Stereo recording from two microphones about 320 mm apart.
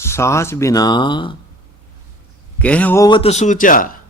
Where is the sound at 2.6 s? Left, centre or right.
Centre; by 3.8 s left.